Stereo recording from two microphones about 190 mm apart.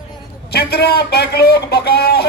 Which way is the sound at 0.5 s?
60° left (ahead or behind).